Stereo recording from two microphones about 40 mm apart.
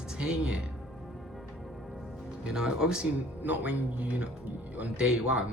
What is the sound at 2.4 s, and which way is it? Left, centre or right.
Speech, centre.